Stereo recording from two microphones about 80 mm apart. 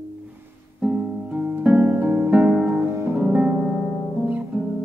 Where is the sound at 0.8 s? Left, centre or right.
Centre.